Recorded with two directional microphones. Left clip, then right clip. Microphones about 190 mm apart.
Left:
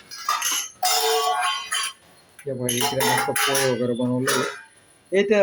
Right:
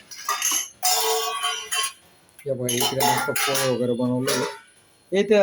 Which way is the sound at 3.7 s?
5° right (ahead or behind).